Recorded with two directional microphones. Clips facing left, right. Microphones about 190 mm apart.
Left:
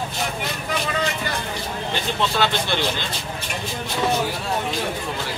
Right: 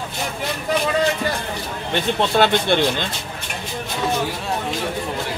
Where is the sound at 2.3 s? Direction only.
55° right (ahead or behind).